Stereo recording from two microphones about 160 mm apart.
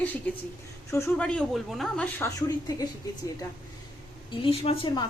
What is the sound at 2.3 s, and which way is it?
Speech, 20° left (ahead or behind).